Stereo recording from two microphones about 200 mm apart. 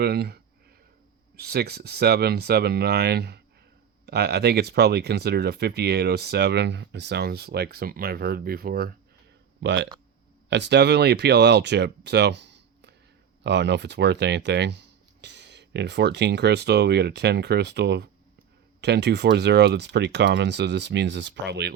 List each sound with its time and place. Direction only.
0.0 s speech: 55° right (ahead or behind)
9.6 s speech: 60° right (ahead or behind)